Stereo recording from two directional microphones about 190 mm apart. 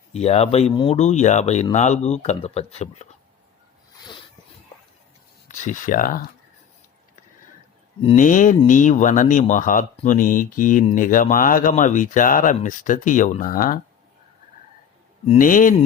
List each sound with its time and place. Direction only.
0.1 s speech: 35° left (ahead or behind)
5.5 s speech: 40° left (ahead or behind)
8.1 s speech: 45° left (ahead or behind)
15.4 s speech: 45° left (ahead or behind)